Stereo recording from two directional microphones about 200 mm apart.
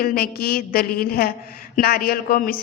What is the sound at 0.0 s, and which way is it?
A woman's voice, 50° left (ahead or behind).